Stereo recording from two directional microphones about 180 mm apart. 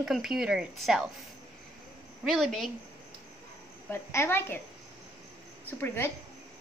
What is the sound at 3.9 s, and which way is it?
Speech, 15° left (ahead or behind).